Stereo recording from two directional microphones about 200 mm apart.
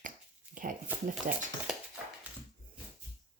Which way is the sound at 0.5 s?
45° right (ahead or behind).